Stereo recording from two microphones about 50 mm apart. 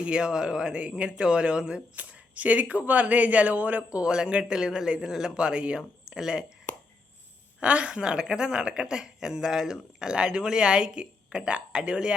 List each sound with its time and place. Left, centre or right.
0.0 s speech: centre
2.0 s speech: right; by 6.4 s centre
7.6 s speech: right